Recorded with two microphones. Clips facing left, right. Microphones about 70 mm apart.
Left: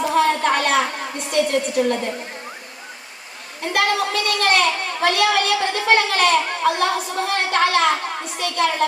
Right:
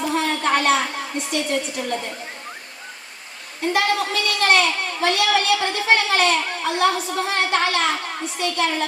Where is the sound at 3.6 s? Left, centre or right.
Left.